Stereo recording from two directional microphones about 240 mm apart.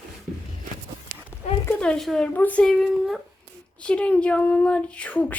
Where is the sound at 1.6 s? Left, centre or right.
Centre.